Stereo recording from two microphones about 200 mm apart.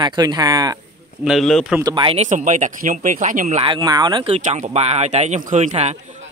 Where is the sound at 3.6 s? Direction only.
20° right (ahead or behind).